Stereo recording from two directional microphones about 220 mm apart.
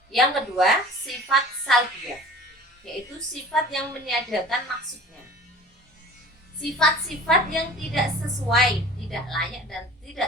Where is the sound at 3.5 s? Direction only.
Centre (ahead or behind).